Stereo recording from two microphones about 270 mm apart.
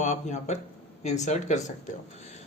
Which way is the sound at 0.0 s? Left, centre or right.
Left.